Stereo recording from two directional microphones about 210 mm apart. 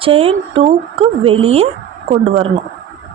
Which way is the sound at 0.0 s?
25° right (ahead or behind).